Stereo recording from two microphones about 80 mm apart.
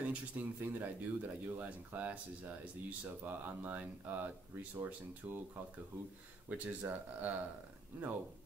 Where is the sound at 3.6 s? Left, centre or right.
Right.